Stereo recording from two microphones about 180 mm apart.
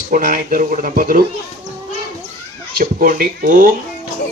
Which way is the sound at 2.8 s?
50° right (ahead or behind).